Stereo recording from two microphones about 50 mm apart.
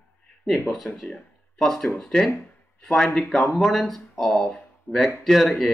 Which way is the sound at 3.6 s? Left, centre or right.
Centre.